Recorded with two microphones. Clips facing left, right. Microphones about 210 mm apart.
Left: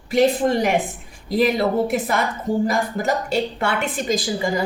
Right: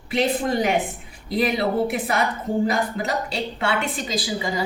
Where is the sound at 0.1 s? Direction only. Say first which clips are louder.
Left 5 dB; 45° left (ahead or behind).